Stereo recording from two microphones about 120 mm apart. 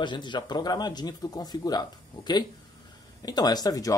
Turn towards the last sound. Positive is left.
turn(degrees=30)  # may be behind; listen again after turning